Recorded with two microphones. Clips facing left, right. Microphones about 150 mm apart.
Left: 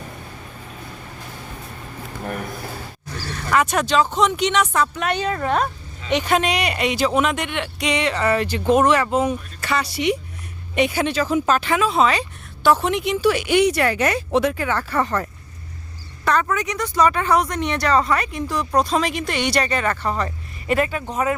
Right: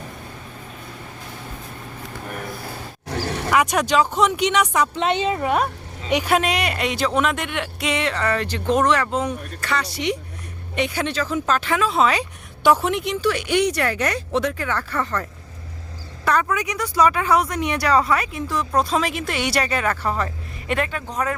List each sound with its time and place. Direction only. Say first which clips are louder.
3.1 s roar: right 8 dB; 85° right
3.5 s a woman's voice: even; 10° right (ahead or behind)
12.9 s speech: left 3 dB; centre (ahead or behind)
16.2 s speech: left 1 dB; 10° right (ahead or behind); by 21.3 s 5° left (ahead or behind)